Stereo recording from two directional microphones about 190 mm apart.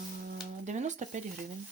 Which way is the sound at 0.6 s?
40° right (ahead or behind).